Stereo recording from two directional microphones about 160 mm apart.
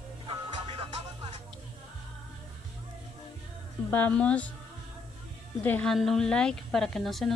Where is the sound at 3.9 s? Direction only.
10° left (ahead or behind).